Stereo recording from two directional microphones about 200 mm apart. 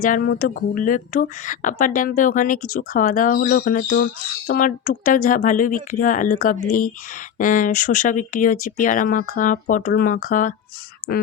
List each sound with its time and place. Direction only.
0.0 s speech: 45° left (ahead or behind)